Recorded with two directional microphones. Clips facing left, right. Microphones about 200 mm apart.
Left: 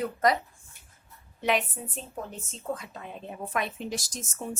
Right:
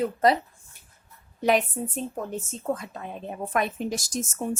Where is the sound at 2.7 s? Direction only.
45° right (ahead or behind).